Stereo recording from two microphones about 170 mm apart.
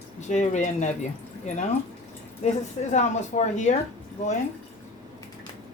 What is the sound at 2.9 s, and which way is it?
Speech, 45° left (ahead or behind).